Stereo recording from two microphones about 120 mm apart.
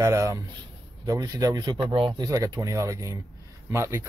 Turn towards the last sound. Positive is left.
turn(degrees=-20)  # may be behind; listen again after turning